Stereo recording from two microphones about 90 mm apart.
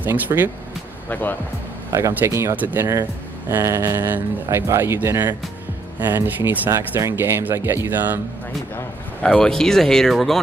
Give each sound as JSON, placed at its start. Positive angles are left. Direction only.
{"t": 0.0, "sound": "speech", "side_deg": -20}
{"t": 1.9, "sound": "speech", "side_deg": -35}
{"t": 2.5, "sound": "speech", "side_deg": -20}
{"t": 6.7, "sound": "speech", "side_deg": -30}
{"t": 9.2, "sound": "speech", "side_deg": 5}